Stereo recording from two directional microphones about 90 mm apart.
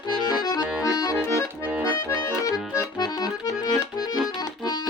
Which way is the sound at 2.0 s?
40° left (ahead or behind).